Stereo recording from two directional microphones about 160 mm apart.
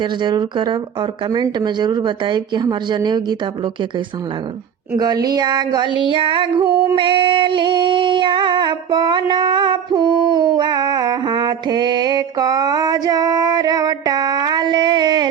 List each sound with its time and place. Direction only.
0.0 s speech: 30° right (ahead or behind)
6.9 s female singing: 35° right (ahead or behind)